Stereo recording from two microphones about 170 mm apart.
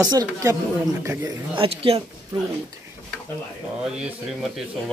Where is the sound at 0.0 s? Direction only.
20° right (ahead or behind).